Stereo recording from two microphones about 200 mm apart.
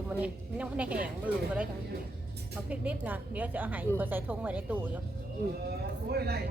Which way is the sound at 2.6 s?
5° right (ahead or behind).